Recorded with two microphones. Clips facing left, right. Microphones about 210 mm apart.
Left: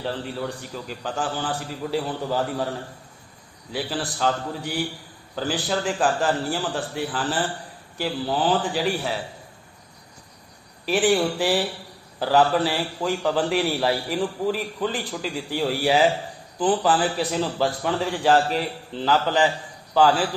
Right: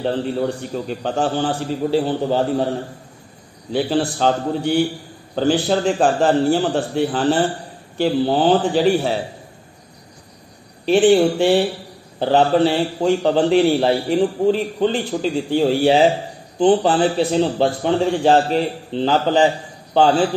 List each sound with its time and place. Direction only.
0.0 s a man's voice: 30° right (ahead or behind)
10.9 s a man's voice: 25° right (ahead or behind)